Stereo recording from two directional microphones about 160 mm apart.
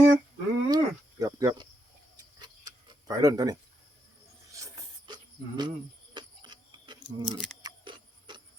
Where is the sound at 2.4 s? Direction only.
25° right (ahead or behind).